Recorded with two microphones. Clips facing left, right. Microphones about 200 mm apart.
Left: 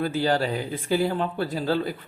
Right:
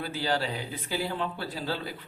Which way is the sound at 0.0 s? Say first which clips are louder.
Left 6 dB; 50° left (ahead or behind).